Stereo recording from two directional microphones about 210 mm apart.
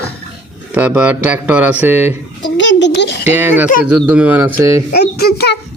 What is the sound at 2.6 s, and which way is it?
Speech, 60° left (ahead or behind).